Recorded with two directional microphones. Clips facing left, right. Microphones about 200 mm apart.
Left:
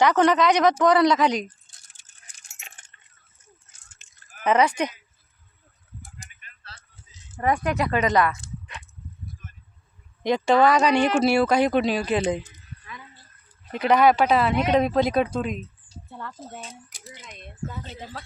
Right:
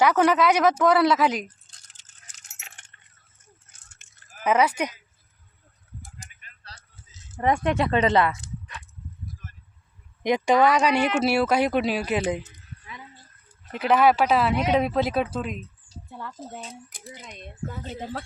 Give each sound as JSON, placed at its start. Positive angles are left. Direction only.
{"t": 0.0, "sound": "speech", "side_deg": -5}
{"t": 1.7, "sound": "keys jangling", "side_deg": 10}
{"t": 4.4, "sound": "speech", "side_deg": -5}
{"t": 7.4, "sound": "speech", "side_deg": -25}
{"t": 10.2, "sound": "speech", "side_deg": -15}
{"t": 12.5, "sound": "a sound", "side_deg": -20}
{"t": 13.7, "sound": "speech", "side_deg": -5}
{"t": 17.1, "sound": "speech", "side_deg": -35}
{"t": 17.8, "sound": "speech", "side_deg": -50}